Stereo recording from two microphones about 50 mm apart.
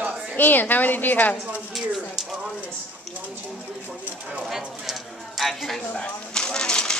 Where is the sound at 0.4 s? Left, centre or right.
Left.